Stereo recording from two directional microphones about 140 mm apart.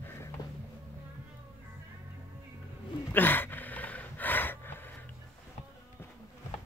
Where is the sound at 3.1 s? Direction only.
15° left (ahead or behind).